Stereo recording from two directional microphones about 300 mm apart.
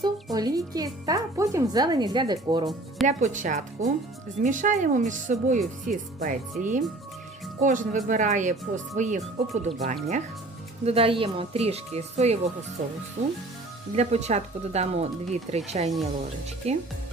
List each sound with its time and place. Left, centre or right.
0.3 s speech: centre
3.1 s speech: right